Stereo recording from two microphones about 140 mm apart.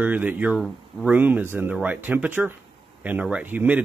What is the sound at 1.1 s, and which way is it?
Speech, 10° right (ahead or behind).